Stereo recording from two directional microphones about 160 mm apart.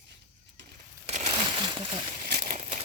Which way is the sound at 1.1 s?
40° right (ahead or behind).